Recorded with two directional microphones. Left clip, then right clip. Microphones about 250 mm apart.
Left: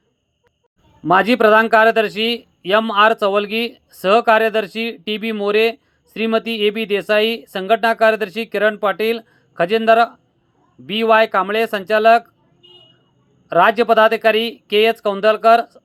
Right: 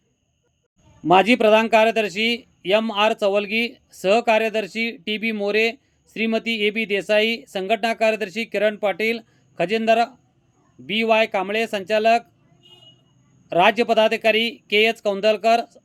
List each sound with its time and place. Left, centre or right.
1.0 s a man's voice: centre
13.5 s a man's voice: centre